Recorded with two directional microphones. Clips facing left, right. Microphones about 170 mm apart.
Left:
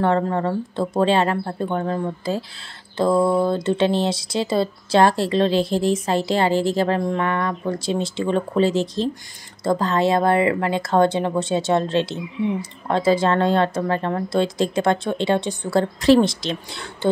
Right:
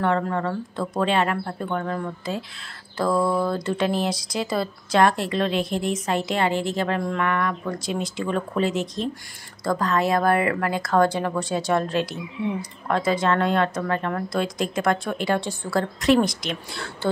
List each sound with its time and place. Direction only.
0.0 s speech: 30° left (ahead or behind)